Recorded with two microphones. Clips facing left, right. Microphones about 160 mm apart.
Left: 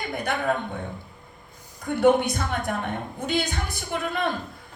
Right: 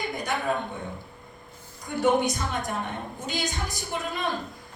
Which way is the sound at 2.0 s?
60° left (ahead or behind).